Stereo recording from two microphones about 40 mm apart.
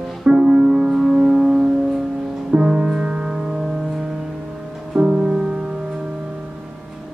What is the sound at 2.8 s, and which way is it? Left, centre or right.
Music, right.